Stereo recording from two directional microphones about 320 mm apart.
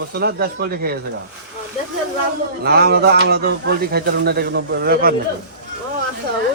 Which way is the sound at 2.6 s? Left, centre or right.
Right.